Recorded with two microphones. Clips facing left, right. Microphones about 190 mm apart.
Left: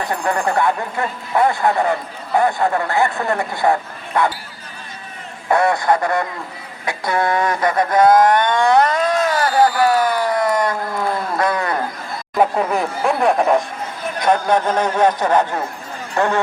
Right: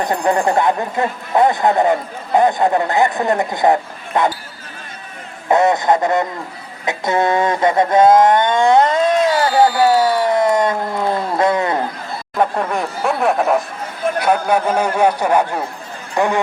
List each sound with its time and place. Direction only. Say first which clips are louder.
0.0 s speech: right 4 dB; 20° right (ahead or behind)
5.5 s speech: right 2 dB; 20° right (ahead or behind)
9.9 s a sound: right 3 dB; 25° right (ahead or behind)
12.4 s speech: left 1 dB; 5° left (ahead or behind); by 16.4 s 15° right (ahead or behind)